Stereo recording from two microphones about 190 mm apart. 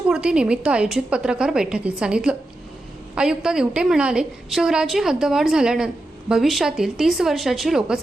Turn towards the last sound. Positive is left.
turn(degrees=0)  # may be behind; listen again after turning